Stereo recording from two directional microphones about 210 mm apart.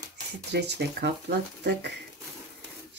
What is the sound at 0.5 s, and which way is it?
Speech, 55° right (ahead or behind).